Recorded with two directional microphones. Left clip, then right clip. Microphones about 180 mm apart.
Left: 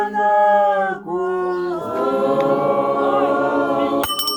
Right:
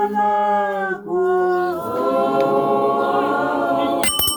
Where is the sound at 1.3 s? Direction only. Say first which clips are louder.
Right 5 dB; 30° left (ahead or behind).